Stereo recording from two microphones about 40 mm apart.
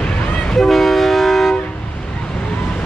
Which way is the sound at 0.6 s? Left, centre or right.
Centre.